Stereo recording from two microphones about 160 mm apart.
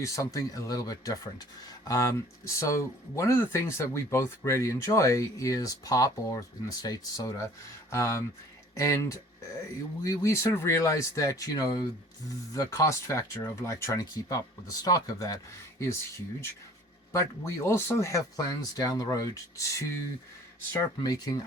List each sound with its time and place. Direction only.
0.0 s speech: 20° left (ahead or behind)